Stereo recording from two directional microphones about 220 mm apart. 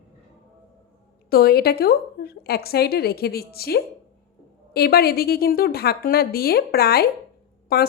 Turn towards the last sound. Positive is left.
turn(degrees=45)  # may be behind; listen again after turning